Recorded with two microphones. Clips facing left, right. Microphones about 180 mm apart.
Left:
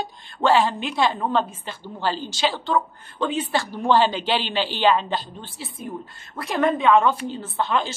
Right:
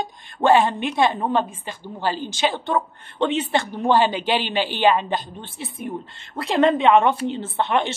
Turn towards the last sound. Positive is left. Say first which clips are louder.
# right 2 dB
turn(degrees=-25)  # may be behind; listen again after turning